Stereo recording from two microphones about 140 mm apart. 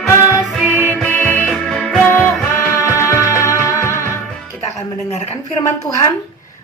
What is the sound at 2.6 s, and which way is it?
Music, 20° left (ahead or behind).